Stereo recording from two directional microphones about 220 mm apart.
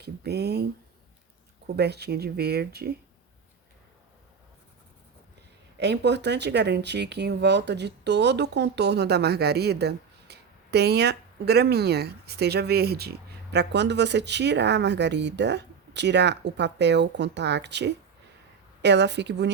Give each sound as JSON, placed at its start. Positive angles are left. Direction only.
{"t": 0.0, "sound": "speech", "side_deg": -45}
{"t": 5.7, "sound": "speech", "side_deg": -50}